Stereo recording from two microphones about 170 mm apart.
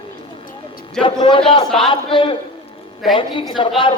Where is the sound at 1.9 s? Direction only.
30° left (ahead or behind).